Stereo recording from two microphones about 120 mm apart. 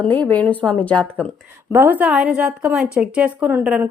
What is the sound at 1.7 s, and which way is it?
A woman's voice, 15° right (ahead or behind).